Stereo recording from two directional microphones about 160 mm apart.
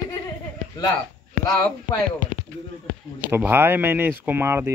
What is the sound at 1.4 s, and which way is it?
Speech, 25° left (ahead or behind).